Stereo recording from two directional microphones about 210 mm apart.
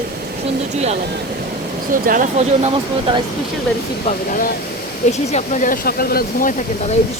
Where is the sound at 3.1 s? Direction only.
25° right (ahead or behind).